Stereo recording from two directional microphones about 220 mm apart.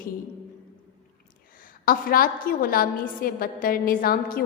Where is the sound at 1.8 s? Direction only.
40° left (ahead or behind).